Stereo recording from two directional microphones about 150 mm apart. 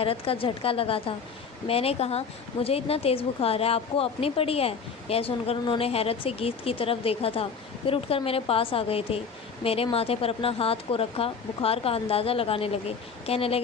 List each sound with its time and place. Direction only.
0.0 s a woman's voice: 40° left (ahead or behind)